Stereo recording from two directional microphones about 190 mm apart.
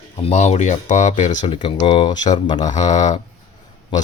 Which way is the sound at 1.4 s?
25° left (ahead or behind).